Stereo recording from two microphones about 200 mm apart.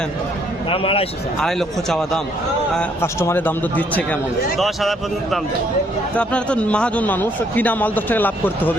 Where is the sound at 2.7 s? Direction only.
10° left (ahead or behind).